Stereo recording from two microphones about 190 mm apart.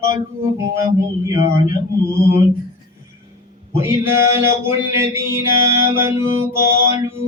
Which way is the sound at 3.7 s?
15° right (ahead or behind).